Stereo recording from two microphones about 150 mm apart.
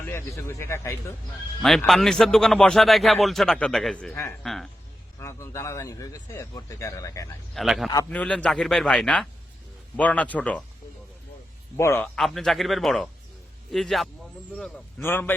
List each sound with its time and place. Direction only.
0.0 s speech: 20° left (ahead or behind)
1.9 s a man's voice: centre (ahead or behind)
4.4 s a man's voice: centre (ahead or behind)
5.2 s a man's voice: 20° left (ahead or behind)
7.5 s a man's voice: centre (ahead or behind)
11.8 s speech: 20° left (ahead or behind)
12.0 s a man's voice: centre (ahead or behind)
15.0 s speech: 15° left (ahead or behind)